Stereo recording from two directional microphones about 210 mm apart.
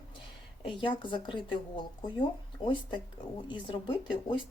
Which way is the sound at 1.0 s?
20° left (ahead or behind).